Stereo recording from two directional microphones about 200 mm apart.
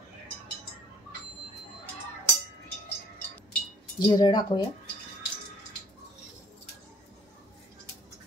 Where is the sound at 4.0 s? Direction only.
20° left (ahead or behind).